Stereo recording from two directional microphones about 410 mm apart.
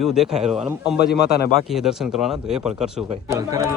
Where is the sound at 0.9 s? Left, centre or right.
Left.